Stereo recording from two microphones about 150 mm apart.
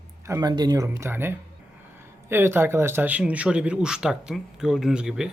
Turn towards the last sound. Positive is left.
turn(degrees=-5)  # may be behind; listen again after turning